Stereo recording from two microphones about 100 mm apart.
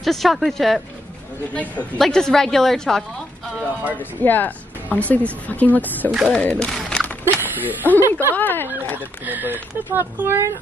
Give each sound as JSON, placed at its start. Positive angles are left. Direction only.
{"t": 0.0, "sound": "a woman's voice", "side_deg": 0}
{"t": 1.5, "sound": "a woman's voice", "side_deg": 15}
{"t": 3.9, "sound": "speech", "side_deg": 20}
{"t": 6.1, "sound": "a woman's voice", "side_deg": -5}
{"t": 6.4, "sound": "speech", "side_deg": 15}
{"t": 6.7, "sound": "a sound", "side_deg": 5}
{"t": 7.3, "sound": "speech", "side_deg": -20}
{"t": 8.4, "sound": "speech", "side_deg": 20}
{"t": 8.9, "sound": "speech", "side_deg": -20}